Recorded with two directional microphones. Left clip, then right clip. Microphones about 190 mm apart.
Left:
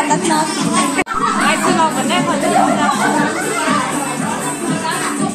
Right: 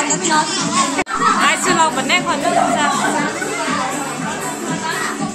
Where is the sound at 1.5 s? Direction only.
20° right (ahead or behind).